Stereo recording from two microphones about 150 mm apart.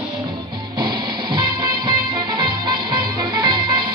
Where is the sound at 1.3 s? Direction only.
30° right (ahead or behind).